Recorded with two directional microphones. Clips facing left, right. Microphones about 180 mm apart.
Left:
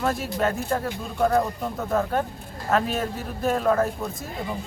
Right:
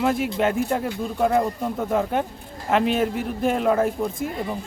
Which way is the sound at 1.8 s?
10° right (ahead or behind).